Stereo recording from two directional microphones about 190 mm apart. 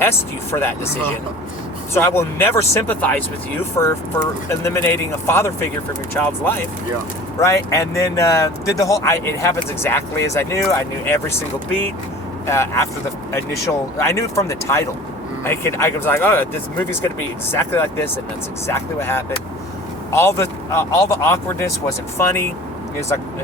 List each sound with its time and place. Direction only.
0.0 s speech: 10° left (ahead or behind)
17.5 s speech: 10° left (ahead or behind)